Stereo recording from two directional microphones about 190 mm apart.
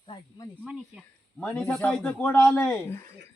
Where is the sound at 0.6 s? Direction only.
5° right (ahead or behind).